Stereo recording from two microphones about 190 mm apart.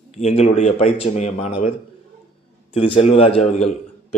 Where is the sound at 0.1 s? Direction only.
35° left (ahead or behind).